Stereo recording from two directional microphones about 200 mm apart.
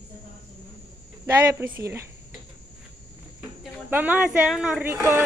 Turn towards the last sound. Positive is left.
turn(degrees=-10)  # may be behind; listen again after turning